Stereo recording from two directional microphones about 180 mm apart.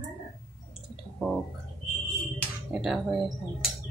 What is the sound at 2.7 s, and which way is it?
Speech, centre (ahead or behind).